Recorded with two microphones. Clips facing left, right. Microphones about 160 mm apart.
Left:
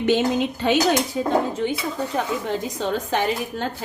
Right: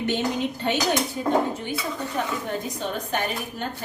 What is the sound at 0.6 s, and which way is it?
Speech, 90° left.